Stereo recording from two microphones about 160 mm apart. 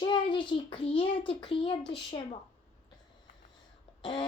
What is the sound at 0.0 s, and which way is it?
A child's voice, 30° left (ahead or behind).